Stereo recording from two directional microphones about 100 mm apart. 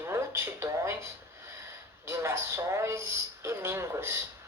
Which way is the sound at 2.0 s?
25° right (ahead or behind).